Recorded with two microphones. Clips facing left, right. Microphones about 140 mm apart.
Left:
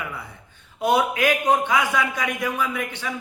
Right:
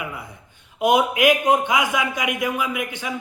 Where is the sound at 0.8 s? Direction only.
15° right (ahead or behind).